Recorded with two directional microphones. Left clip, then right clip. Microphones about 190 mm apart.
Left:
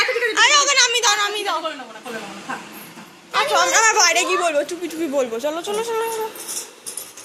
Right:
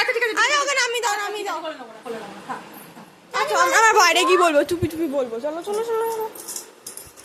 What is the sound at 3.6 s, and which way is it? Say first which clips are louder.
A woman's voice: right 4 dB; 30° right (ahead or behind).